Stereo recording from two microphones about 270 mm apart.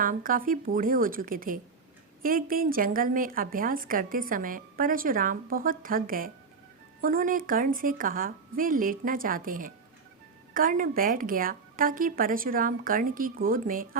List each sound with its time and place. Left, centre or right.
0.0 s a woman's voice: right